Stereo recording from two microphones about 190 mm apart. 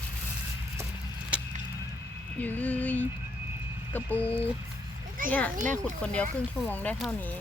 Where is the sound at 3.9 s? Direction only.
10° left (ahead or behind).